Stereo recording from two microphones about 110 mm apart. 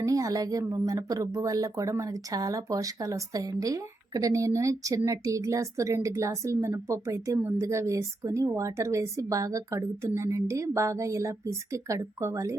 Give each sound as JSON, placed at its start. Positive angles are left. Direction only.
{"t": 0.0, "sound": "speech", "side_deg": -30}